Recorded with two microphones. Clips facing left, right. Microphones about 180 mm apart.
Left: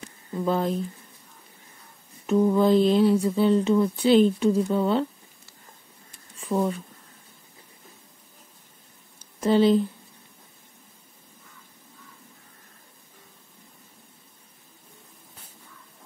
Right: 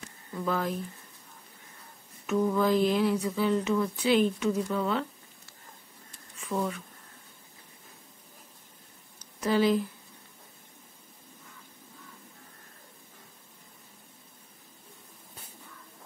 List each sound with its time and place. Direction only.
0.3 s speech: 25° left (ahead or behind)
2.2 s speech: 25° left (ahead or behind)
6.3 s a sound: 30° left (ahead or behind)
9.2 s speech: 25° left (ahead or behind)